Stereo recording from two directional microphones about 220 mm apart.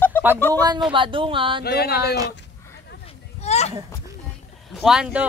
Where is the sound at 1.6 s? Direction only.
45° left (ahead or behind).